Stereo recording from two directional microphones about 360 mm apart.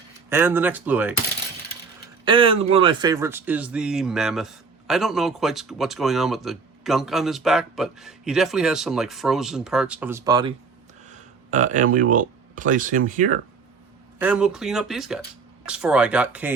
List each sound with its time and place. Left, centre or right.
0.3 s speech: centre
2.2 s speech: centre
14.2 s speech: centre